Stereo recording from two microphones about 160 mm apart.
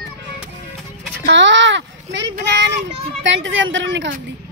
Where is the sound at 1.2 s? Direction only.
90° right.